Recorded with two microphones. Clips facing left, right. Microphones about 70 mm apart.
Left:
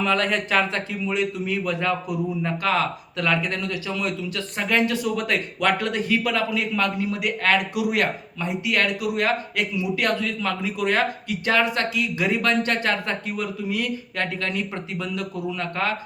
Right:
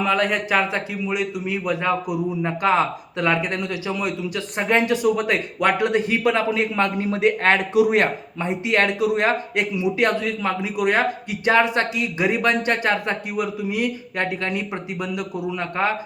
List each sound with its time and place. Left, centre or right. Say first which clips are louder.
0.0 s a man's voice: right 2 dB; centre